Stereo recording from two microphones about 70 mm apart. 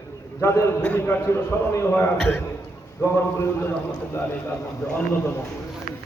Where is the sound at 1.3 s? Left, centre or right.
Left.